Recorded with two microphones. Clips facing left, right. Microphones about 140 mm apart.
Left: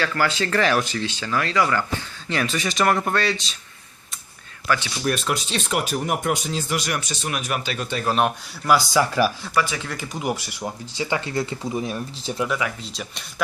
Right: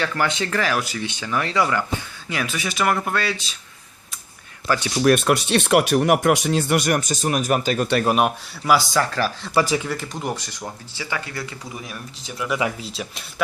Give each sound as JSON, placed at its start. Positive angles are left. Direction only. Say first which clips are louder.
{"t": 0.0, "sound": "speech", "louder": "even", "side_deg": -20}
{"t": 0.6, "sound": "speech", "louder": "left 4 dB", "side_deg": -5}
{"t": 5.0, "sound": "speech", "louder": "right 7 dB", "side_deg": -60}
{"t": 8.2, "sound": "speech", "louder": "right 1 dB", "side_deg": -5}
{"t": 9.0, "sound": "speech", "louder": "left 2 dB", "side_deg": 10}
{"t": 9.6, "sound": "speech", "louder": "right 4 dB", "side_deg": -35}
{"t": 9.8, "sound": "speech", "louder": "even", "side_deg": 0}
{"t": 10.9, "sound": "speech", "louder": "left 6 dB", "side_deg": 20}
{"t": 12.8, "sound": "speech", "louder": "right 3 dB", "side_deg": 0}